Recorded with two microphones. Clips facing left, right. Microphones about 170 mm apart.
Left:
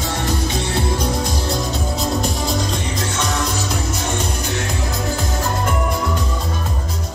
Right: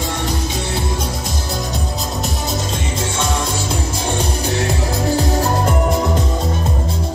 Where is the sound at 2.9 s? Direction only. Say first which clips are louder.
Right 3 dB; 30° right (ahead or behind).